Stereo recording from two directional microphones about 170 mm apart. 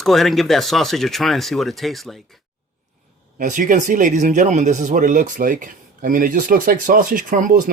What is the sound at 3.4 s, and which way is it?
Speech, 50° right (ahead or behind).